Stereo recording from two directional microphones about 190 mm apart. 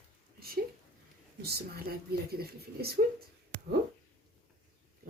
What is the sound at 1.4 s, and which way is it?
Speech, 55° right (ahead or behind).